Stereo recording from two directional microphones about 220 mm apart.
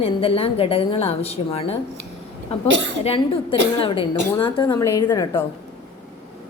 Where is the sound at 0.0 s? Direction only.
25° left (ahead or behind).